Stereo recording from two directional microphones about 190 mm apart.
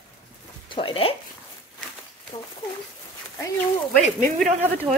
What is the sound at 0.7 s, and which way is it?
Speech, 25° left (ahead or behind).